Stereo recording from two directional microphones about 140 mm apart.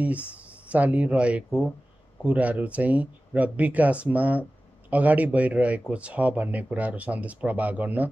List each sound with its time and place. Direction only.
0.0 s speech: 10° right (ahead or behind)